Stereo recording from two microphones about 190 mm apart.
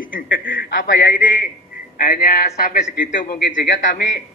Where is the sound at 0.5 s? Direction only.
60° left (ahead or behind).